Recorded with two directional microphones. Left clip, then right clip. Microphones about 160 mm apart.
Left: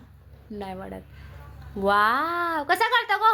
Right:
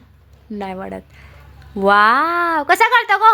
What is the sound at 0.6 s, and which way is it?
Speech, 40° right (ahead or behind).